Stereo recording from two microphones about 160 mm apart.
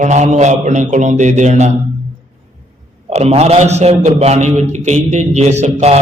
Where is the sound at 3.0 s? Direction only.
40° right (ahead or behind).